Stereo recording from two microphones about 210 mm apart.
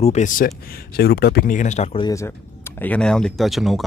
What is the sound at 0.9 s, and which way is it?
Speech, 50° left (ahead or behind).